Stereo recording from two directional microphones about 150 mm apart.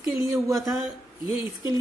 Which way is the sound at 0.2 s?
25° right (ahead or behind).